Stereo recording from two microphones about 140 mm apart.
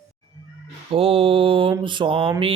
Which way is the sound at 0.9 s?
40° right (ahead or behind).